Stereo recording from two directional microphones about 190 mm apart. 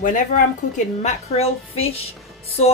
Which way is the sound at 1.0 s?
30° left (ahead or behind).